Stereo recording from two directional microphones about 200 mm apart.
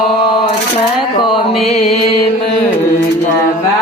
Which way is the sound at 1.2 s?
25° left (ahead or behind).